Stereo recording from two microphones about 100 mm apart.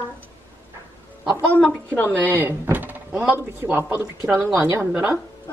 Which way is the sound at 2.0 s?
20° right (ahead or behind).